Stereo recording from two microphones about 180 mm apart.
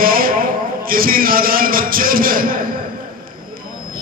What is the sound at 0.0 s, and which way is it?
A man's voice, 55° right (ahead or behind).